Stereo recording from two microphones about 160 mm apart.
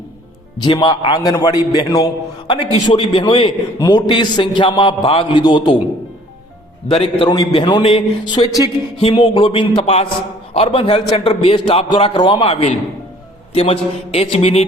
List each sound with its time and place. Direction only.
0.6 s a man's voice: 30° left (ahead or behind)
6.9 s a man's voice: 35° left (ahead or behind)
7.3 s a man's voice: 25° left (ahead or behind)